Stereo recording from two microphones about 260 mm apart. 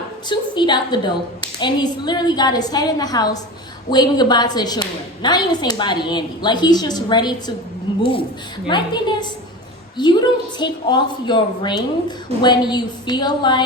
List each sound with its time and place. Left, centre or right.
0.3 s a woman's voice: centre
8.6 s a woman's voice: centre